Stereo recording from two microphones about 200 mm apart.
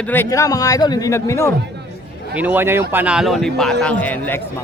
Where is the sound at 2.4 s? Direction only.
10° right (ahead or behind); by 4.3 s 10° left (ahead or behind).